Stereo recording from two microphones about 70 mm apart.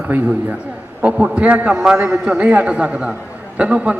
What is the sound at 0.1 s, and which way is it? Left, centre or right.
A man's voice, right.